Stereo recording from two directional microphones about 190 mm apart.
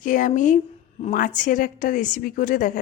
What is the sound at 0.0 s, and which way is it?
A woman's voice, 45° left (ahead or behind).